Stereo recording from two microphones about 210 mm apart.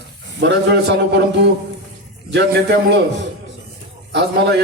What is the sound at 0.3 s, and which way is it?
A man's voice, 55° right (ahead or behind).